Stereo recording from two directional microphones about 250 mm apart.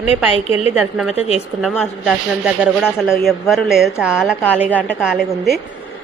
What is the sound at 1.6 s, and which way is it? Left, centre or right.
A woman's voice, centre.